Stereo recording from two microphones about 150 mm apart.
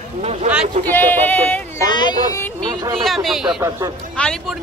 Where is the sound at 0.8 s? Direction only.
15° left (ahead or behind).